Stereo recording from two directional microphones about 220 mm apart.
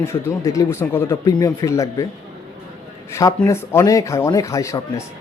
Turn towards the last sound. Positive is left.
turn(degrees=15)  # may be behind; listen again after turning